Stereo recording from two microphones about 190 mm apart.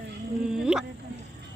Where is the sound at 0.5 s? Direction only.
5° right (ahead or behind).